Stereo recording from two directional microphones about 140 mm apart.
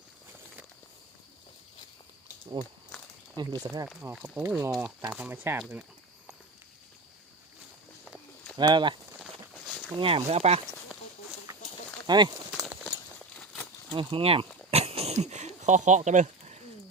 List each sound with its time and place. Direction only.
2.6 s speech: 35° right (ahead or behind)
4.0 s speech: 10° right (ahead or behind)
8.5 s speech: 30° right (ahead or behind)
10.0 s speech: 40° right (ahead or behind)
12.0 s speech: 30° right (ahead or behind)
13.3 s a sound: 10° left (ahead or behind)
13.9 s a sound: 35° right (ahead or behind); by 16.6 s 55° right (ahead or behind)